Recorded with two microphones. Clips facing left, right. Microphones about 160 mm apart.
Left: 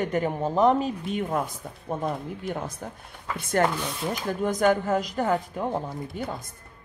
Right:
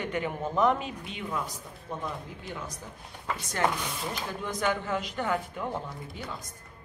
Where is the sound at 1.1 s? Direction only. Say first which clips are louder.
Left 7 dB; 50° left (ahead or behind).